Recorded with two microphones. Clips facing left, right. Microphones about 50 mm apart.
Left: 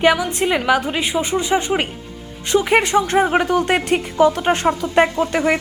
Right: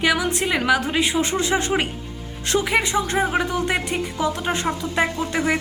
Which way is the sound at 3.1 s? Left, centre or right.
Left.